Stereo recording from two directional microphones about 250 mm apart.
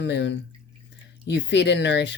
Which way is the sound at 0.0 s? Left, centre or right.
Left.